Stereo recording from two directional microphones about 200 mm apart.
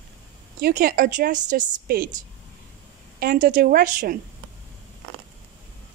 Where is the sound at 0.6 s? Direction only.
45° right (ahead or behind).